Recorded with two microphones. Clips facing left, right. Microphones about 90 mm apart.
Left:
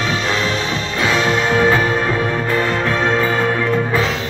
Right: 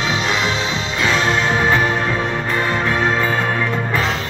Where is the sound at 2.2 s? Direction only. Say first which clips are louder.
Left 2 dB; 20° right (ahead or behind).